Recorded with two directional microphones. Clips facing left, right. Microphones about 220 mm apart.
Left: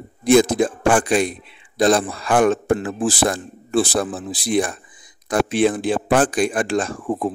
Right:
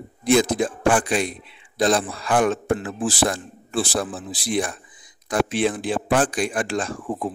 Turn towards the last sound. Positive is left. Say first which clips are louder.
# left 4 dB
turn(degrees=50)  # may be behind; listen again after turning